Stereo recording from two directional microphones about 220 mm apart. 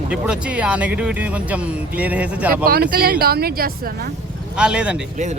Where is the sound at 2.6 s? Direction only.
45° right (ahead or behind).